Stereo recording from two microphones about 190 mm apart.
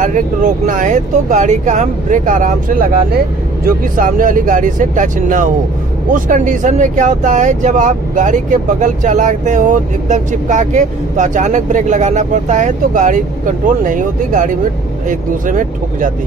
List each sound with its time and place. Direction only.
0.0 s speech: 45° right (ahead or behind)